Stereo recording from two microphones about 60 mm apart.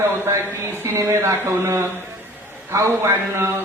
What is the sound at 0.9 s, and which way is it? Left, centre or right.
A man's voice, right.